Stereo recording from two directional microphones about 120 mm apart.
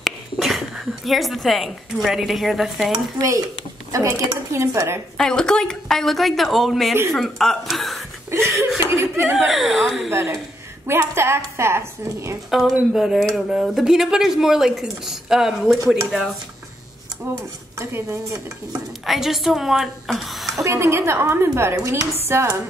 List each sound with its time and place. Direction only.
0.0 s speech: centre (ahead or behind)
2.9 s a woman's voice: 30° right (ahead or behind)
5.1 s speech: 5° left (ahead or behind)
8.3 s chuckle: 25° right (ahead or behind)
9.5 s speech: centre (ahead or behind)
10.1 s a woman's voice: 25° right (ahead or behind)
12.4 s speech: centre (ahead or behind)
17.4 s a woman's voice: 25° right (ahead or behind)
19.0 s speech: centre (ahead or behind)
20.6 s a woman's voice: 25° right (ahead or behind)